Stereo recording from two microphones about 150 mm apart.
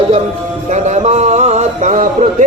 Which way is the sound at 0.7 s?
50° right (ahead or behind).